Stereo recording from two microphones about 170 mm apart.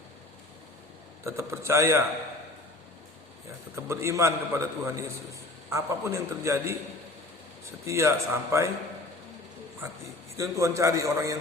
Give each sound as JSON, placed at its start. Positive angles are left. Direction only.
{"t": 1.2, "sound": "a man's voice", "side_deg": -15}
{"t": 3.8, "sound": "a man's voice", "side_deg": -15}
{"t": 7.9, "sound": "a man's voice", "side_deg": -15}
{"t": 10.3, "sound": "a man's voice", "side_deg": -15}